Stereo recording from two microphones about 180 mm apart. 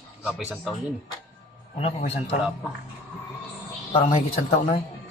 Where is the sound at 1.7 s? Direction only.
35° left (ahead or behind).